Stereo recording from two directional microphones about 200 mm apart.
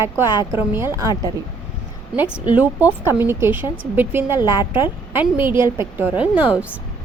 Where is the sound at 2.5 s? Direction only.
10° right (ahead or behind).